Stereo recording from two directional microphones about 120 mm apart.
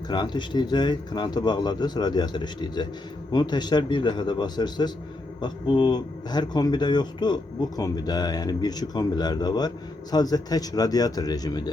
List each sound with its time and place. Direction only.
0.1 s speech: 40° left (ahead or behind)